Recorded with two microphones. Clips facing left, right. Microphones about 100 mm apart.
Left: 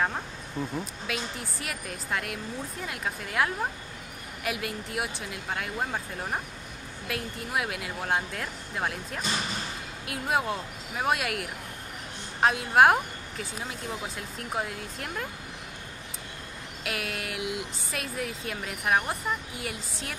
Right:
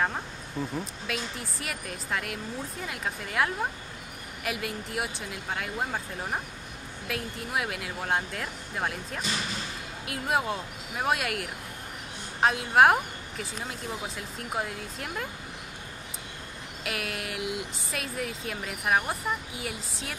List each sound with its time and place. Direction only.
0.0 s speech: centre (ahead or behind)
16.8 s speech: centre (ahead or behind)